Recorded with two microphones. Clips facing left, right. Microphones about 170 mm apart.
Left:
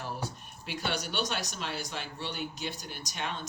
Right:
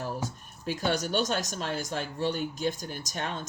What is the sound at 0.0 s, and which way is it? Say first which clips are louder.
Speech: right 4 dB; 45° right (ahead or behind).